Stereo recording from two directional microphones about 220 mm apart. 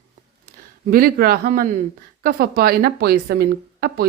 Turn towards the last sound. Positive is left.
turn(degrees=-45)  # may be behind; listen again after turning